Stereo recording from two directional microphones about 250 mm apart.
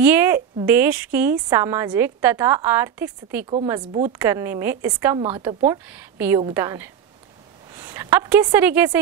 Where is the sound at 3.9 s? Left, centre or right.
Right.